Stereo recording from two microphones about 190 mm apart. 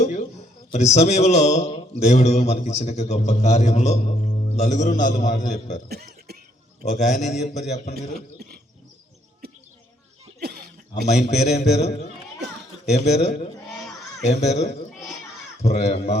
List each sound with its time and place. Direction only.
0.0 s a man's voice: 40° left (ahead or behind)
5.9 s cough: 55° right (ahead or behind)
6.8 s a man's voice: 40° left (ahead or behind)
11.3 s a man's voice: 35° left (ahead or behind)